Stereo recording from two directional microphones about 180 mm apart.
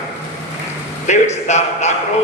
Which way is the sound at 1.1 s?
40° left (ahead or behind).